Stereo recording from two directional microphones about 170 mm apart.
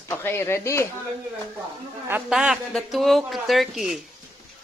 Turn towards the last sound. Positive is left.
turn(degrees=0)  # may be behind; listen again after turning